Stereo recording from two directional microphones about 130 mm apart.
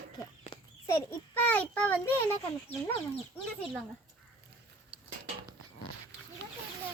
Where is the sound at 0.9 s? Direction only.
20° left (ahead or behind).